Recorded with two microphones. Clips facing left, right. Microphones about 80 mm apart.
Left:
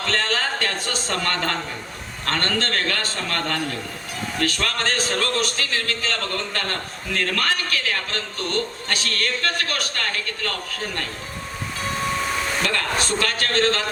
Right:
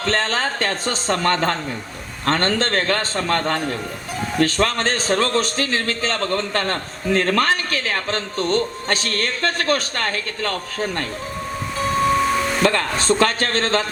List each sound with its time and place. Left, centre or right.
0.0 s a man's voice: right
12.6 s a man's voice: right